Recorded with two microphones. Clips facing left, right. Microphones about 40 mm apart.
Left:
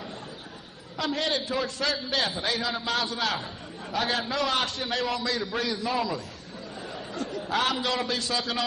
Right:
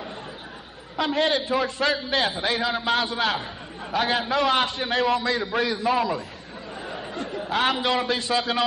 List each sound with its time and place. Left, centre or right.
0.9 s a man's voice: centre
6.9 s a sound: right
7.5 s a man's voice: centre